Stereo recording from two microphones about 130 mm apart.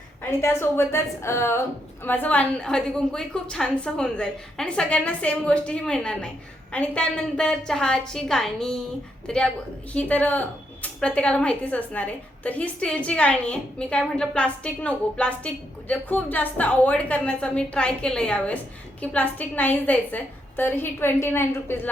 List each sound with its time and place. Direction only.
0.2 s a woman's voice: 20° left (ahead or behind)